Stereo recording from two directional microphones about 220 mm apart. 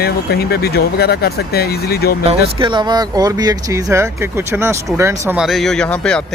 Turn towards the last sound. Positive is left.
turn(degrees=5)  # may be behind; listen again after turning